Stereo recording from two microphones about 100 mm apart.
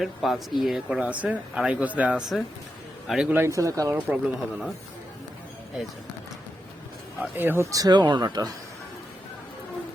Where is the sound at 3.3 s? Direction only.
30° right (ahead or behind).